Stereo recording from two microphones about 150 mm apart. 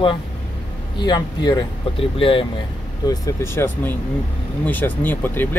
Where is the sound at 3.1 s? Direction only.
20° left (ahead or behind).